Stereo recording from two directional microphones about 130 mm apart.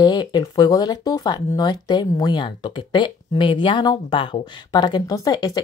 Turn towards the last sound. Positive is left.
turn(degrees=30)  # may be behind; listen again after turning